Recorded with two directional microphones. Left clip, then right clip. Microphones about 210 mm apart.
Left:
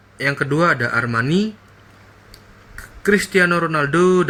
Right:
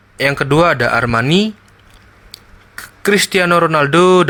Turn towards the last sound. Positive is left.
turn(degrees=-40)  # may be behind; listen again after turning